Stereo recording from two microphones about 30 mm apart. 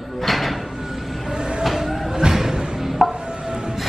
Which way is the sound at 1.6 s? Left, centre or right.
Centre.